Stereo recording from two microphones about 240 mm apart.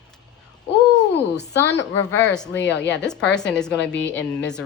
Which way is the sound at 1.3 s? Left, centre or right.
Left.